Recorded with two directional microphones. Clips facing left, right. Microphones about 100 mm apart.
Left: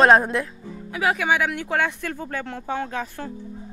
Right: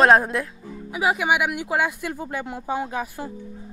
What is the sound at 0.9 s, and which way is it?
Speech, 15° right (ahead or behind).